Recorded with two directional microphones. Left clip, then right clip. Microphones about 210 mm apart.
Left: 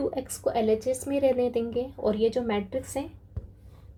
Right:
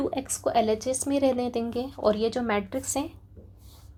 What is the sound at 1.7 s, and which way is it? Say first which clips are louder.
Speech: right 2 dB; 35° right (ahead or behind).